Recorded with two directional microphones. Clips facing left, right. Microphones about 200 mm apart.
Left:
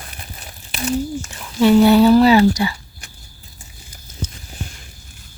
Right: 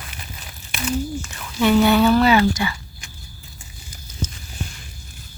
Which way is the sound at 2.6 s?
40° left (ahead or behind).